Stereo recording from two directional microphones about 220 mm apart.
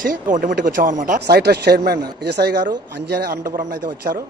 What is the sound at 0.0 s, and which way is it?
Speech, 40° right (ahead or behind).